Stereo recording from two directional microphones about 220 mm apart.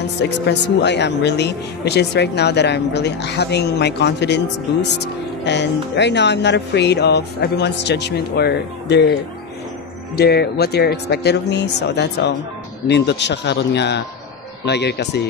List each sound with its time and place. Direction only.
0.2 s speech: 50° left (ahead or behind)
10.1 s speech: 45° left (ahead or behind)